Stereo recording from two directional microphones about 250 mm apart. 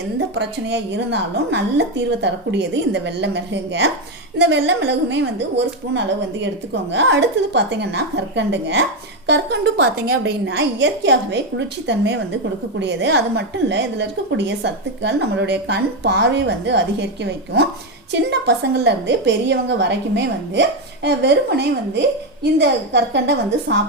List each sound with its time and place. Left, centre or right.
0.3 s a woman's voice: right